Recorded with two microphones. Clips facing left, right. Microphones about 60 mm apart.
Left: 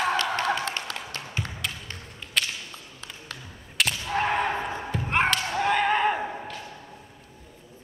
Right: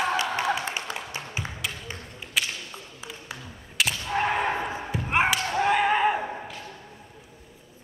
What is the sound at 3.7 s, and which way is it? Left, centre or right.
Whip, centre.